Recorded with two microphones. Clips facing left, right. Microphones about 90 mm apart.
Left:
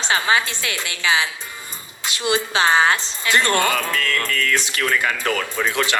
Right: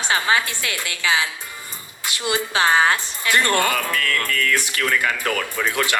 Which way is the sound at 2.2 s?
20° left (ahead or behind).